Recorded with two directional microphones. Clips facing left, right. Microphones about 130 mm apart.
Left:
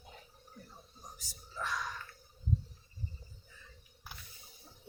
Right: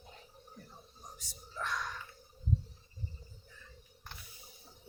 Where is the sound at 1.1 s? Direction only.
Centre (ahead or behind).